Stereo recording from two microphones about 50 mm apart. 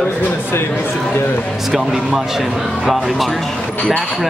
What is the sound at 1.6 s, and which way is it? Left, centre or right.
Speech, centre.